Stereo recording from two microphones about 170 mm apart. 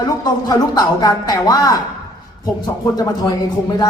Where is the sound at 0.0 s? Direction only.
25° left (ahead or behind).